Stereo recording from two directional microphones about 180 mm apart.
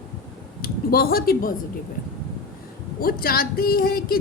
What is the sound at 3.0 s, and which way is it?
A woman's voice, 55° left (ahead or behind).